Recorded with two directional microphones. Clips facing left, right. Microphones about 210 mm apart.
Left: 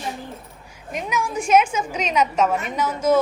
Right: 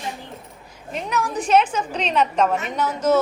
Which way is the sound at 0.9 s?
10° left (ahead or behind).